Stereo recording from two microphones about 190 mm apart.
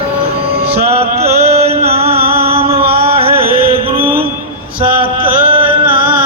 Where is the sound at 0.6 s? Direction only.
30° right (ahead or behind).